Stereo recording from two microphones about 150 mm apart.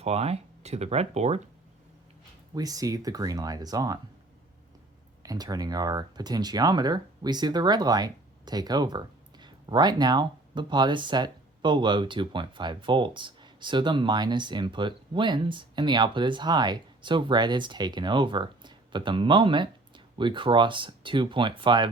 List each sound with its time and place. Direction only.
0.0 s speech: 45° right (ahead or behind)
2.6 s speech: 25° right (ahead or behind)
5.2 s speech: 25° right (ahead or behind)